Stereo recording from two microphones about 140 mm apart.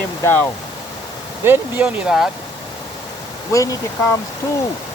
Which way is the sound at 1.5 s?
5° right (ahead or behind).